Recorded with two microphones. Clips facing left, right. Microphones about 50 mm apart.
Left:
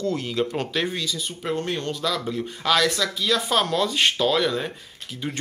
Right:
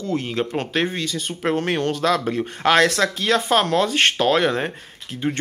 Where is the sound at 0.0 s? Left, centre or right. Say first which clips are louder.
Right 1 dB; right.